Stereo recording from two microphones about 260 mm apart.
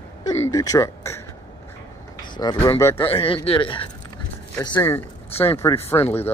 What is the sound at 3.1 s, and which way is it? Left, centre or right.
Speech, left.